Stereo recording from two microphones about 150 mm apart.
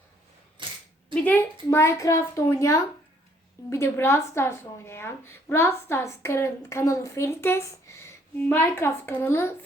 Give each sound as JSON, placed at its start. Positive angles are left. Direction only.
{"t": 0.6, "sound": "camera", "side_deg": -30}
{"t": 1.1, "sound": "a woman's voice", "side_deg": 10}